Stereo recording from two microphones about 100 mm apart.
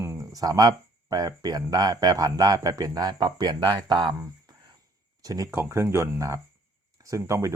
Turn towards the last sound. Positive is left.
turn(degrees=-30)  # may be behind; listen again after turning